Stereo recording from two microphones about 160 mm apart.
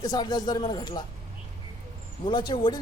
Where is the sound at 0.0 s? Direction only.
25° left (ahead or behind).